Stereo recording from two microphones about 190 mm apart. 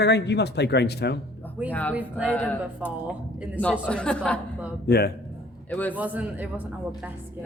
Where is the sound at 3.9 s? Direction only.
5° left (ahead or behind).